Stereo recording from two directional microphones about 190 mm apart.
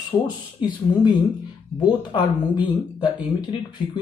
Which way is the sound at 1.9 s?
25° left (ahead or behind).